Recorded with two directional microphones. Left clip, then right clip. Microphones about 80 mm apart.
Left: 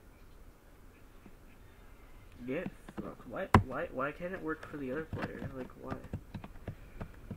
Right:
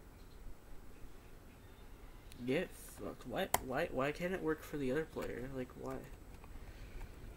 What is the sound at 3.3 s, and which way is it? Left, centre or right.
Speech, right.